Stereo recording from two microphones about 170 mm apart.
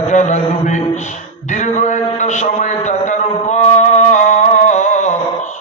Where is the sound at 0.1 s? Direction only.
45° left (ahead or behind).